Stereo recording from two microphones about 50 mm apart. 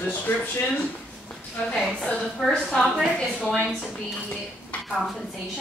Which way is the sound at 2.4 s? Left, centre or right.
Centre.